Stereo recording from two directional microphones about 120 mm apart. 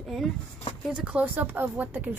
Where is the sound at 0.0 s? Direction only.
Centre (ahead or behind).